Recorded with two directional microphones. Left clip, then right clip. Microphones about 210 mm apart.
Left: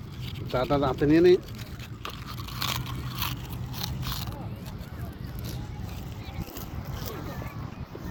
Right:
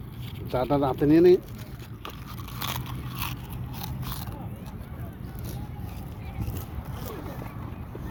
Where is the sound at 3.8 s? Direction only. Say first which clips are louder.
Left 4 dB; 20° right (ahead or behind).